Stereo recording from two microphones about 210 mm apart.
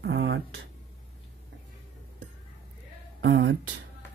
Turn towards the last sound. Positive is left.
turn(degrees=-60)  # may be behind; listen again after turning